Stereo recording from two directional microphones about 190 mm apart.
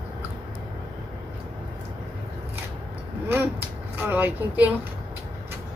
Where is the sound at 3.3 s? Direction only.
10° right (ahead or behind).